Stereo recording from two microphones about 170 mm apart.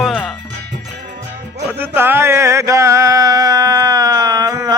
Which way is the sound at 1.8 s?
10° right (ahead or behind).